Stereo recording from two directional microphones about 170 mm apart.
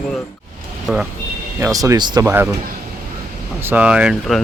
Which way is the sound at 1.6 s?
20° right (ahead or behind).